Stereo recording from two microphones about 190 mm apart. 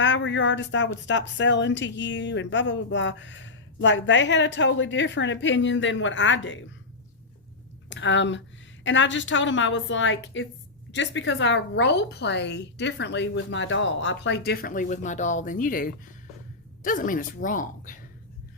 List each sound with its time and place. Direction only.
0.0 s speech: 75° left (ahead or behind)
7.9 s a woman's voice: 75° left (ahead or behind); by 18.0 s 45° left (ahead or behind)